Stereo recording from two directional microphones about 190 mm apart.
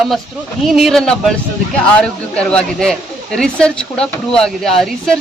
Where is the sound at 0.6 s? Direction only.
Centre (ahead or behind).